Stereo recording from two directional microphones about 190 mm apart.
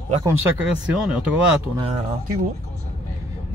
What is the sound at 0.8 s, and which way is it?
Speech, 5° right (ahead or behind).